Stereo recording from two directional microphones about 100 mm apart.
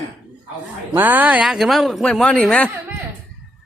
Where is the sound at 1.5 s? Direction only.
Centre (ahead or behind).